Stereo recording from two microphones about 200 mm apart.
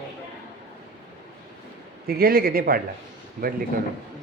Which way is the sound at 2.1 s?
50° right (ahead or behind).